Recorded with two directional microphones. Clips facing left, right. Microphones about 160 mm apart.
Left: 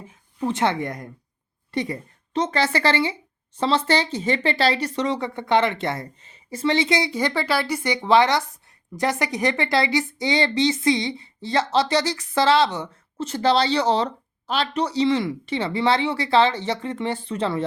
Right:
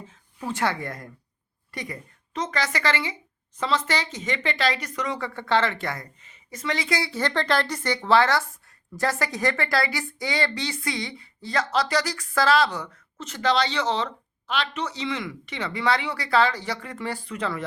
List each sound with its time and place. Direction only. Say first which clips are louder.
0.0 s a woman's voice: left 7 dB; 15° left (ahead or behind)